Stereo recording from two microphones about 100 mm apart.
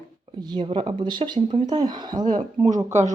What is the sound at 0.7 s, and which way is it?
Speech, 60° right (ahead or behind).